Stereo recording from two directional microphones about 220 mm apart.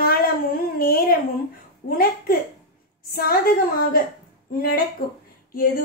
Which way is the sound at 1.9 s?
40° left (ahead or behind).